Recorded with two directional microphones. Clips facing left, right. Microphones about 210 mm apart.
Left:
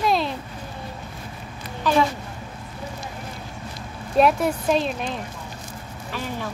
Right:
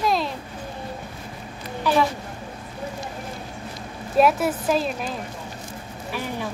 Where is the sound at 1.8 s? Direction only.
10° right (ahead or behind).